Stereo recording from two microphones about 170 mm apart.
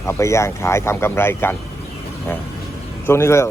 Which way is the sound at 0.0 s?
15° left (ahead or behind).